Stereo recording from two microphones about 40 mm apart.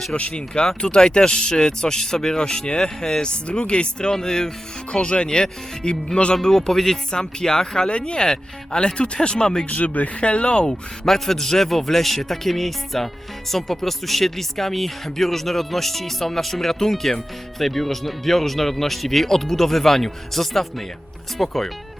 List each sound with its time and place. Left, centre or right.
0.1 s speech: left
4.9 s speech: left
6.3 s speech: centre
9.6 s speech: left
10.6 s speech: centre